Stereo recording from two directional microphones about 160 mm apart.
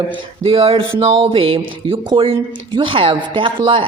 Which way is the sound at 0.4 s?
35° right (ahead or behind).